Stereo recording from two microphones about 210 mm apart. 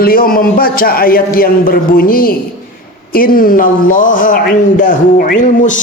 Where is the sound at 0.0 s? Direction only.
45° left (ahead or behind).